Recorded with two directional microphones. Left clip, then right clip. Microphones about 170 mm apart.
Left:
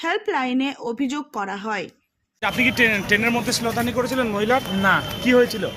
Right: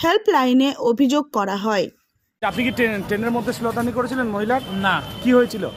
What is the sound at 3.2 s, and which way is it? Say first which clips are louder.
A man's voice: left 1 dB; 40° right (ahead or behind).